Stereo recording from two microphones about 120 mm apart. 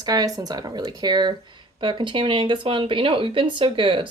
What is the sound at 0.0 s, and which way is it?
Speech, 35° right (ahead or behind).